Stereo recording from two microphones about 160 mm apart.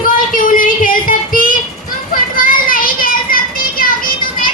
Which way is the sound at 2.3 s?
60° left (ahead or behind).